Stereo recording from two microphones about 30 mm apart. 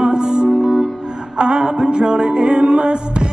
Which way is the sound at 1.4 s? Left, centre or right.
Right.